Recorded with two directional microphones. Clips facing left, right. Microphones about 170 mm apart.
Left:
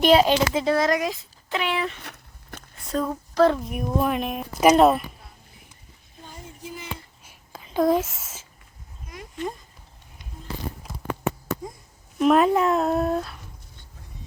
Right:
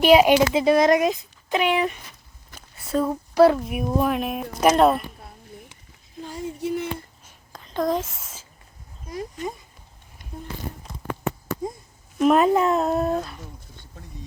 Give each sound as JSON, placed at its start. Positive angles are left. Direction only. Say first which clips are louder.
{"t": 0.0, "sound": "speech", "louder": "right 3 dB", "side_deg": -10}
{"t": 2.6, "sound": "a sound", "louder": "right 3 dB", "side_deg": -5}
{"t": 3.1, "sound": "speech", "louder": "right 3 dB", "side_deg": -10}
{"t": 6.2, "sound": "female singing", "louder": "right 11 dB", "side_deg": -85}
{"t": 7.3, "sound": "whispering", "louder": "left 1 dB", "side_deg": 5}
{"t": 12.2, "sound": "speech", "louder": "right 1 dB", "side_deg": 0}